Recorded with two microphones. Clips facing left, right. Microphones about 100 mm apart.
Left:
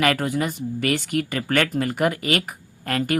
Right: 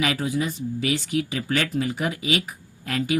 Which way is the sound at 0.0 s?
55° left (ahead or behind).